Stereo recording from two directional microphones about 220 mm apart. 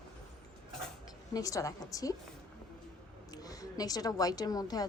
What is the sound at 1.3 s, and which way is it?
Speech, 15° left (ahead or behind).